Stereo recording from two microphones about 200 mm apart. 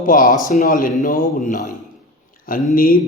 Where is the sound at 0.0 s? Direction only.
45° left (ahead or behind).